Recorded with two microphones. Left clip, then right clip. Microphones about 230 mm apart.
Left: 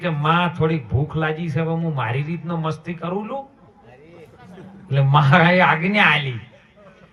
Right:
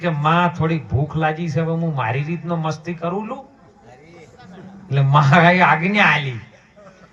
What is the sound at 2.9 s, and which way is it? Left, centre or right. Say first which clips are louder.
Speech: right 2 dB; right.